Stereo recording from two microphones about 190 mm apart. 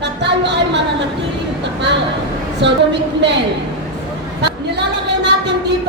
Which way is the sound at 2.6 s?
65° right (ahead or behind).